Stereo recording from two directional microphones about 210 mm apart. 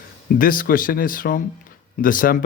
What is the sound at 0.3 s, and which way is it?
Speech, 40° left (ahead or behind).